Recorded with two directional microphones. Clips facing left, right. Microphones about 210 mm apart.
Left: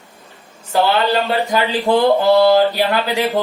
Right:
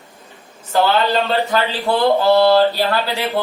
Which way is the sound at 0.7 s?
15° left (ahead or behind).